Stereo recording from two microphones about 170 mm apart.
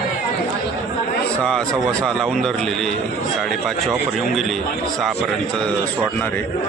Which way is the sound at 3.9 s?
Centre (ahead or behind).